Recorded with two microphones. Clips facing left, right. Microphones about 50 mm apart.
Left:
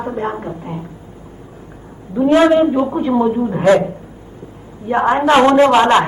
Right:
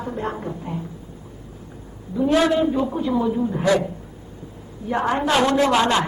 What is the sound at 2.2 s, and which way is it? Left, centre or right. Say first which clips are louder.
A woman's voice: left 7 dB; left.